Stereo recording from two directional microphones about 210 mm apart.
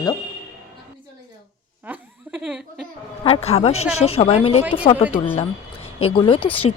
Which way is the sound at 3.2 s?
30° left (ahead or behind).